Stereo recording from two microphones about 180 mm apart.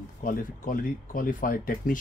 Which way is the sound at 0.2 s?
50° left (ahead or behind).